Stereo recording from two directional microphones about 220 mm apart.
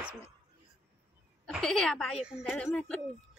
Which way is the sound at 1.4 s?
Centre (ahead or behind).